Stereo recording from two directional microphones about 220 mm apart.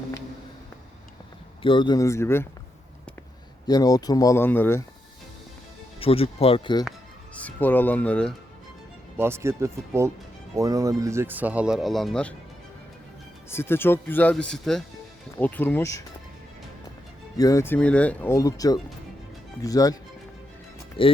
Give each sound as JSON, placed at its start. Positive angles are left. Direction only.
{"t": 1.6, "sound": "speech", "side_deg": 20}
{"t": 3.7, "sound": "speech", "side_deg": 15}
{"t": 6.0, "sound": "speech", "side_deg": 25}
{"t": 7.3, "sound": "speech", "side_deg": 5}
{"t": 9.1, "sound": "speech", "side_deg": -10}
{"t": 13.5, "sound": "speech", "side_deg": 10}
{"t": 17.3, "sound": "speech", "side_deg": 15}